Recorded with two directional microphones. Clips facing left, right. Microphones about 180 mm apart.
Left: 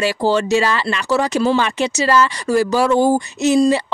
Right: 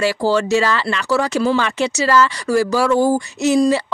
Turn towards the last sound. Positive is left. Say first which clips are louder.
# left 1 dB
turn(degrees=20)  # may be behind; listen again after turning